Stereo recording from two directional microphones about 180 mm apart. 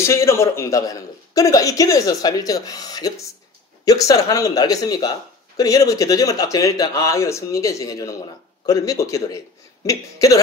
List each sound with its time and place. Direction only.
0.0 s a man's voice: 15° left (ahead or behind)